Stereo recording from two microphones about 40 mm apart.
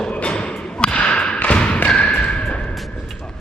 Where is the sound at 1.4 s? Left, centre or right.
Left.